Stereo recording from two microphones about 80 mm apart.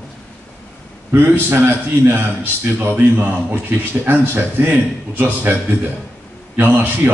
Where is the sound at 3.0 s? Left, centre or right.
Right.